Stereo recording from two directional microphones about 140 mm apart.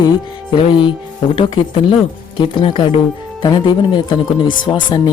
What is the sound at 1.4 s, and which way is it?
Speech, 40° left (ahead or behind).